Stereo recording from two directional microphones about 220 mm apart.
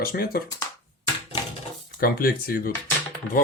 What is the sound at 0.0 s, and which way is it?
Speech, 45° left (ahead or behind).